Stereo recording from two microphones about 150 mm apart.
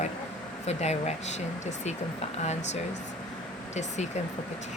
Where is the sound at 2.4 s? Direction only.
50° left (ahead or behind).